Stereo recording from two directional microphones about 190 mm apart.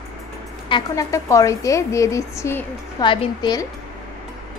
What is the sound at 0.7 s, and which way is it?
A woman's voice, 20° left (ahead or behind).